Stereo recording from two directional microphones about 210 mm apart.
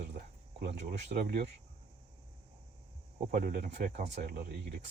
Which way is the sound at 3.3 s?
40° right (ahead or behind).